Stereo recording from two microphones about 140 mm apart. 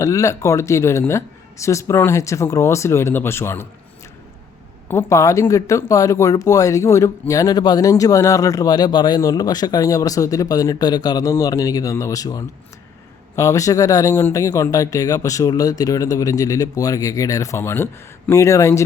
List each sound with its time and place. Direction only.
0.0 s speech: 20° left (ahead or behind)
4.9 s speech: 20° left (ahead or behind)